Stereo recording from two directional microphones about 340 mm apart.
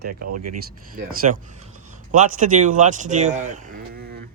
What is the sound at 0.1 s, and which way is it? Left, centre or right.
Speech, right.